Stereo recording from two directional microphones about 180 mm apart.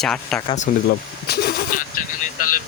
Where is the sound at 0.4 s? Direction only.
40° left (ahead or behind).